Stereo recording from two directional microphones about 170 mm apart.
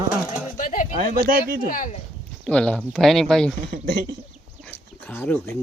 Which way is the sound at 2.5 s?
5° left (ahead or behind).